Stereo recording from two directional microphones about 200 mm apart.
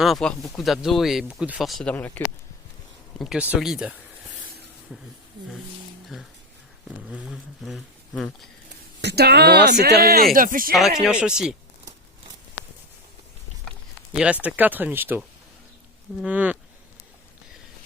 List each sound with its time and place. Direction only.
0.0 s speech: centre (ahead or behind)
3.2 s speech: 5° right (ahead or behind)
7.1 s speech: centre (ahead or behind)
9.0 s speech: 55° right (ahead or behind)
10.7 s speech: centre (ahead or behind)
14.1 s speech: 5° right (ahead or behind)
16.2 s speech: 5° right (ahead or behind)